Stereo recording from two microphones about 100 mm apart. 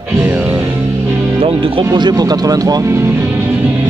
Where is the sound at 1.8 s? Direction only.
45° right (ahead or behind); by 3.4 s 20° right (ahead or behind).